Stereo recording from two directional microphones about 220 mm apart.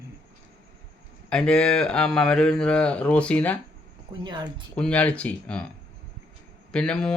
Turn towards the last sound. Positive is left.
turn(degrees=5)  # may be behind; listen again after turning